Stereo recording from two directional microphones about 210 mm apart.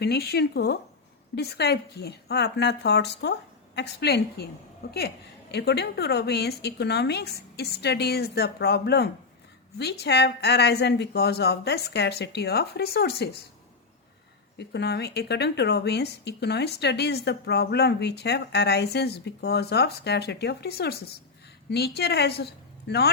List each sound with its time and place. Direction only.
0.0 s speech: 50° left (ahead or behind)
14.6 s speech: 50° left (ahead or behind)